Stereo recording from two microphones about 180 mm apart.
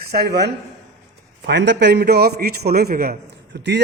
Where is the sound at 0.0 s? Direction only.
60° right (ahead or behind).